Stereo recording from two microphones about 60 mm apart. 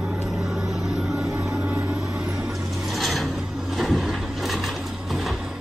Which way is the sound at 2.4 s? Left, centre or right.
Centre.